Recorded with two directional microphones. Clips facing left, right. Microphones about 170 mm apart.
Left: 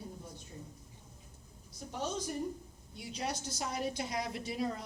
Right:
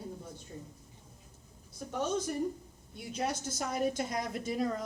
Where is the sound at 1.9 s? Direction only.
55° right (ahead or behind).